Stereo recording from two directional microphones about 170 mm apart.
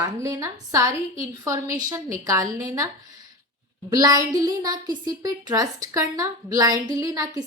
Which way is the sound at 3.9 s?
20° right (ahead or behind).